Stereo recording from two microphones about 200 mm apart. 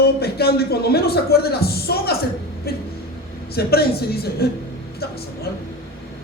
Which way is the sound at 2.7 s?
50° left (ahead or behind).